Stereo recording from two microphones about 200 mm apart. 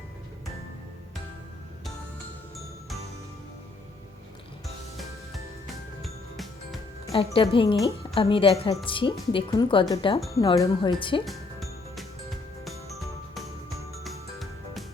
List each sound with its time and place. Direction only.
6.0 s music: centre (ahead or behind)
7.3 s speech: 25° left (ahead or behind)
11.3 s music: centre (ahead or behind)